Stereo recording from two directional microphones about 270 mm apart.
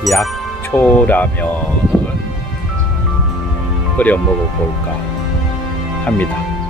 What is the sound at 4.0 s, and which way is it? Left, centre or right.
Speech, centre.